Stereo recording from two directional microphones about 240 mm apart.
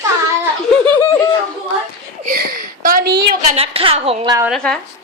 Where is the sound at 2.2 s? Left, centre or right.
Right.